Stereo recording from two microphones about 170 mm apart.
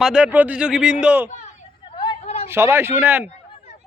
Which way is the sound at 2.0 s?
35° left (ahead or behind).